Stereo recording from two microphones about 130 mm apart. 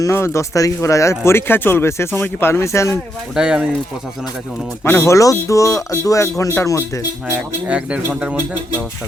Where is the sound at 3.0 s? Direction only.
5° right (ahead or behind).